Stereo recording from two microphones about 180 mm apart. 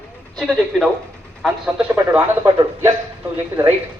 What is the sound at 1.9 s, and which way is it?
A man's voice, 15° right (ahead or behind).